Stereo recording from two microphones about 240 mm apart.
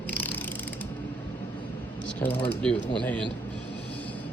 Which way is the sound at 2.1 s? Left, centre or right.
Centre.